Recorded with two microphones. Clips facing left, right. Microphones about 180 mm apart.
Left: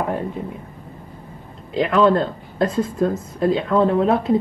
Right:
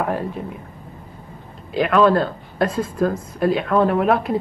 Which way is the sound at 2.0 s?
25° left (ahead or behind).